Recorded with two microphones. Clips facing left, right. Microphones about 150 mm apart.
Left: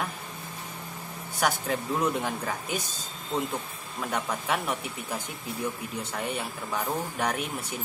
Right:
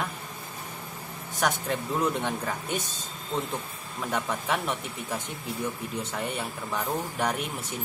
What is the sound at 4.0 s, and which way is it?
Speech, centre (ahead or behind).